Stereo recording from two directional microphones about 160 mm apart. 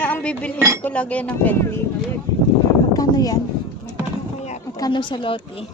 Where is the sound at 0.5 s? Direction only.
15° right (ahead or behind).